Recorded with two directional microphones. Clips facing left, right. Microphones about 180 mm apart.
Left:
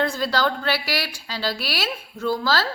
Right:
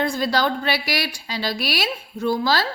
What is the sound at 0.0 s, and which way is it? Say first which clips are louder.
A woman's voice: right 1 dB; 15° right (ahead or behind).